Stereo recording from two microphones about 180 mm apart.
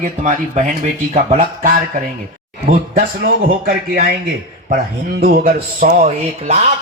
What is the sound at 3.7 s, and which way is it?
Speech, 55° right (ahead or behind).